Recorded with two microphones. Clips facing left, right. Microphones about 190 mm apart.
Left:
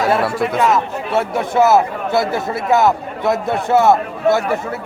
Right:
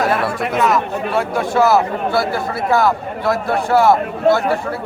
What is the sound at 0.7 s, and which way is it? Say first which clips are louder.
Speech: even; 20° left (ahead or behind).